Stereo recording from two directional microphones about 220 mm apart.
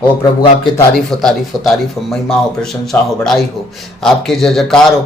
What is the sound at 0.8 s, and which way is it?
Speech, centre (ahead or behind).